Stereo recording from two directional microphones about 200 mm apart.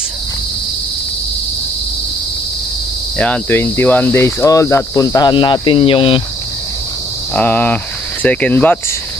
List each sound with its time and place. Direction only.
3.2 s cricket: 10° left (ahead or behind); by 6.2 s 25° left (ahead or behind)
7.3 s speech: 10° left (ahead or behind)